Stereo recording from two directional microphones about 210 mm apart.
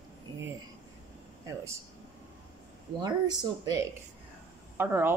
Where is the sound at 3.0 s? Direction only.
20° right (ahead or behind).